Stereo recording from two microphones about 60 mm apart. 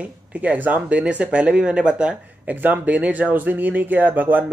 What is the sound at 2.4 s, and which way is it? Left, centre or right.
Speech, right.